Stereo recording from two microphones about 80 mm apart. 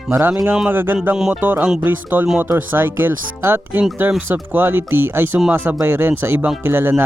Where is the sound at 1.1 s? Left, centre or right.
Centre.